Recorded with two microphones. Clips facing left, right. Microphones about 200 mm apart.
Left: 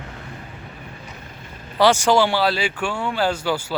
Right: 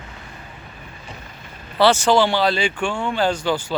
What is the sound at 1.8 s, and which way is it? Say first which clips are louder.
Speech: right 1 dB; 10° left (ahead or behind).